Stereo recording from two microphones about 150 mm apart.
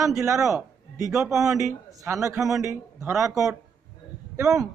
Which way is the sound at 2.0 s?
20° right (ahead or behind).